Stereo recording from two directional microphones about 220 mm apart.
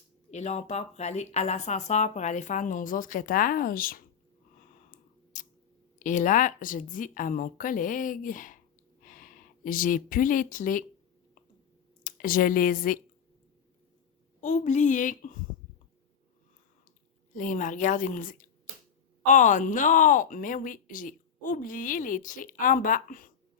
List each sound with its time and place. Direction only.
0.3 s speech: 30° left (ahead or behind)
4.9 s a sound: 35° left (ahead or behind)
6.0 s speech: 35° left (ahead or behind)
12.0 s speech: 40° left (ahead or behind)
14.4 s speech: 35° left (ahead or behind)
17.3 s speech: 35° left (ahead or behind)